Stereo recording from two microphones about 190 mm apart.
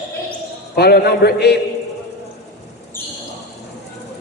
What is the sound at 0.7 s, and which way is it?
Speech, 60° left (ahead or behind).